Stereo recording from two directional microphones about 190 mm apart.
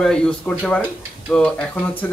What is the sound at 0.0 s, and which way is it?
Speech, 5° left (ahead or behind).